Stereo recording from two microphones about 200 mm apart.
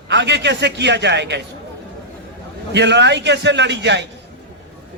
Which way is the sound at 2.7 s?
60° right (ahead or behind).